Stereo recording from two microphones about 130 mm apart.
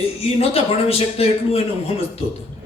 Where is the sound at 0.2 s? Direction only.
50° left (ahead or behind).